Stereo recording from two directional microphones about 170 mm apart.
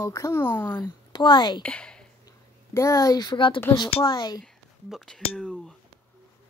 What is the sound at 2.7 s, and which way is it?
A woman's voice, 20° left (ahead or behind).